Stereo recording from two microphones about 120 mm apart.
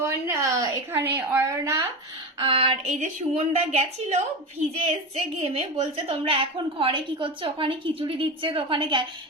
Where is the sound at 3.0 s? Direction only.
70° right (ahead or behind).